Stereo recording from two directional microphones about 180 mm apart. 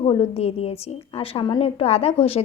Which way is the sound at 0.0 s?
35° left (ahead or behind).